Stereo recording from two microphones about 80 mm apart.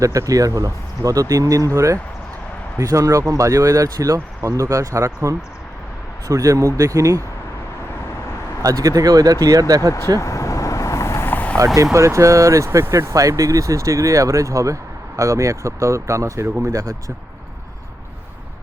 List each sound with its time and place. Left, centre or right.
0.0 s speech: right
8.6 s speech: right
10.2 s vehicle: left
11.5 s speech: right